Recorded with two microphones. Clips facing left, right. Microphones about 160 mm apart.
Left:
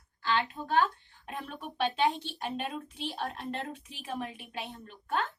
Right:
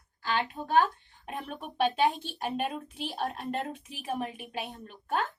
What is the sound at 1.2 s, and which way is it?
Speech, 50° right (ahead or behind).